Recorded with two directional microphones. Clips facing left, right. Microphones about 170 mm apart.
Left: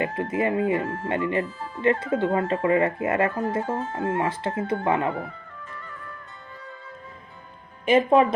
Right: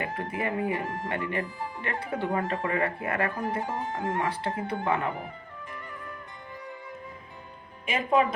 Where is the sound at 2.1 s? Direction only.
20° left (ahead or behind).